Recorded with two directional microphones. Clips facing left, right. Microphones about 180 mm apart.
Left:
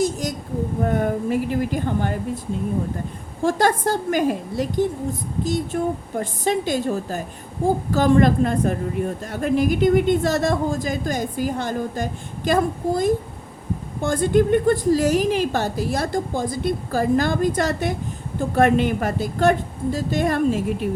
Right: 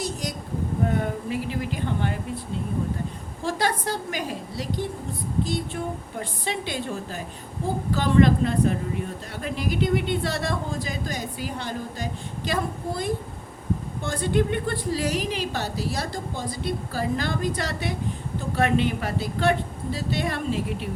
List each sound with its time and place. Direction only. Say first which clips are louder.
0.0 s a sound: left 8 dB; 45° left (ahead or behind)
0.9 s speech: left 5 dB; 50° left (ahead or behind)
3.4 s a woman's voice: left 7 dB; 50° left (ahead or behind)